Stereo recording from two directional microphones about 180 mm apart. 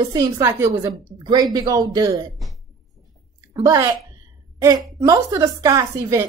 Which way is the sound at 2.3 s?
Centre (ahead or behind).